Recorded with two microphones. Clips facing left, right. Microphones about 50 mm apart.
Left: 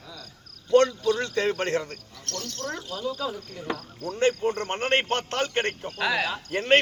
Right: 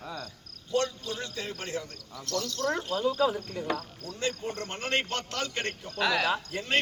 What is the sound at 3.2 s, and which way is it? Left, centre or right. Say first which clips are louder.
Speech: right 5 dB; right.